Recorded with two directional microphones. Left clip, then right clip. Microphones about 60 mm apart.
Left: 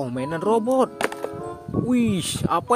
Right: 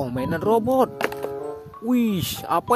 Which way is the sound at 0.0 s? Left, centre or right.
Right.